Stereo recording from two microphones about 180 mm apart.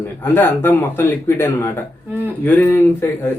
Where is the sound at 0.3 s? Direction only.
10° left (ahead or behind).